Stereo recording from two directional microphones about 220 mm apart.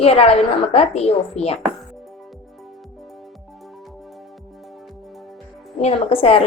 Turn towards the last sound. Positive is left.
turn(degrees=25)  # may be behind; listen again after turning